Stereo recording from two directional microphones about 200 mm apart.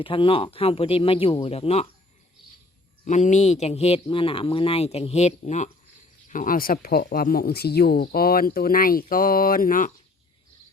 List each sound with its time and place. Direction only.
0.0 s speech: 25° left (ahead or behind)
3.0 s a man's voice: 35° left (ahead or behind)